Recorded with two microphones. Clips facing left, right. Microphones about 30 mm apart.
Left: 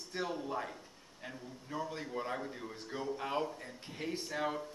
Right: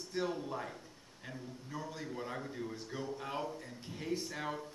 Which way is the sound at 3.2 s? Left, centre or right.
Left.